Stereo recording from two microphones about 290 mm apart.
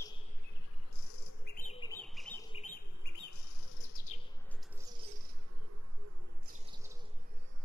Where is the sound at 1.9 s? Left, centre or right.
Centre.